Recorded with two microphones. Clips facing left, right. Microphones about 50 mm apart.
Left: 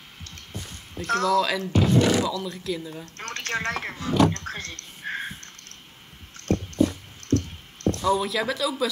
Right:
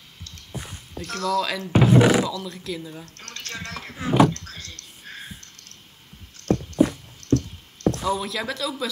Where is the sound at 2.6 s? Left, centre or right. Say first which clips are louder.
Left 2 dB; centre.